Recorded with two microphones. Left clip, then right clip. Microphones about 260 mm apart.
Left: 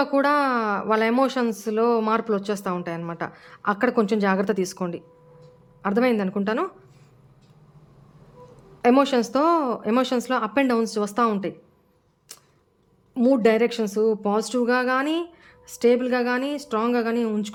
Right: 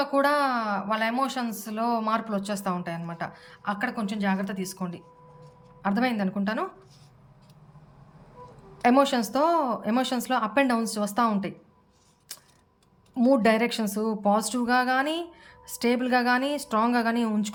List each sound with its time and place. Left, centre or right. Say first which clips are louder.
0.0 s speech: left 3 dB; centre
8.8 s speech: left 3 dB; centre
12.3 s a sound: right 2 dB; centre
13.1 s speech: left 3 dB; centre